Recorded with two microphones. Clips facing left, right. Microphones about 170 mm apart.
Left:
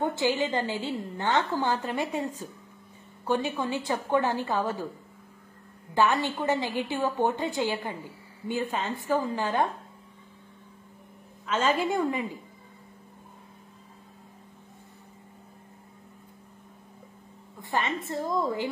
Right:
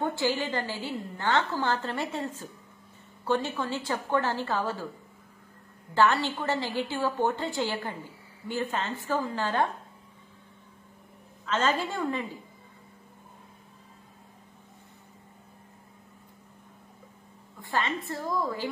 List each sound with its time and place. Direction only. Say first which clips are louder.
0.0 s a woman's voice: left 2 dB; 20° left (ahead or behind)
5.9 s a woman's voice: even; 15° left (ahead or behind)
11.4 s a woman's voice: left 2 dB; 10° left (ahead or behind)
17.6 s a woman's voice: left 1 dB; 20° left (ahead or behind)